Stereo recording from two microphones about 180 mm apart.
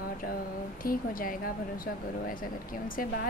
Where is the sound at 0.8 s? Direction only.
50° left (ahead or behind).